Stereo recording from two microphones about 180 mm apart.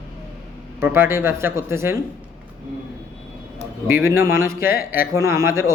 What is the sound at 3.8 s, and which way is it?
Speech, 15° right (ahead or behind).